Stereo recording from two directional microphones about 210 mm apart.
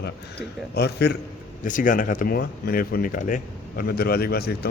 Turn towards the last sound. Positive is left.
turn(degrees=50)  # may be behind; listen again after turning